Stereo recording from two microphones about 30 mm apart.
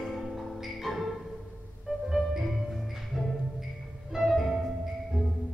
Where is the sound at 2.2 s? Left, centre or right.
Centre.